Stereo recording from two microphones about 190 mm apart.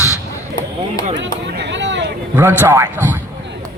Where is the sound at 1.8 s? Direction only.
70° right (ahead or behind).